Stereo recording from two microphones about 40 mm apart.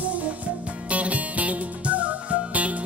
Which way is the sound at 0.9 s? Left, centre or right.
Right.